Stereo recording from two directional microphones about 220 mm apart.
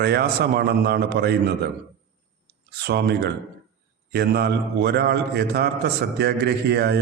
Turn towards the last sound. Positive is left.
turn(degrees=-50)  # may be behind; listen again after turning